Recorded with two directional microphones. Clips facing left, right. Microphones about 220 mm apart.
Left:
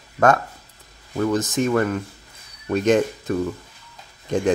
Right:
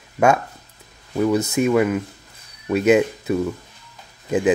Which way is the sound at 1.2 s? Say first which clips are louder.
Right 2 dB; 10° right (ahead or behind).